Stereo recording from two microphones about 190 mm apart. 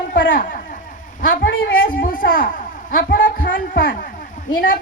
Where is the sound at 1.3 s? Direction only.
50° left (ahead or behind).